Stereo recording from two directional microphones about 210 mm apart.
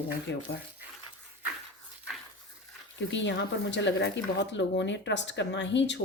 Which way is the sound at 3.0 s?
60° left (ahead or behind).